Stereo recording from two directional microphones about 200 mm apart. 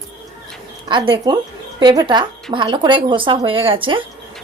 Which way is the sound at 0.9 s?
25° right (ahead or behind).